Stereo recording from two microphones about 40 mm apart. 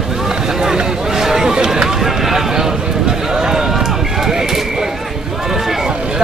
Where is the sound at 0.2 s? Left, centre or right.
Centre.